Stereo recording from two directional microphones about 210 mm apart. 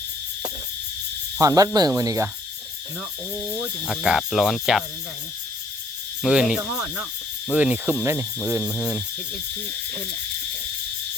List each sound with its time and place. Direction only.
1.4 s speech: 15° right (ahead or behind)
3.8 s cricket: centre (ahead or behind)
6.2 s cricket: 5° right (ahead or behind)